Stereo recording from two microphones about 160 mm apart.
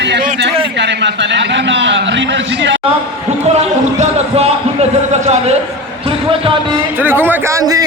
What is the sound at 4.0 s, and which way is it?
A man's voice, 40° right (ahead or behind).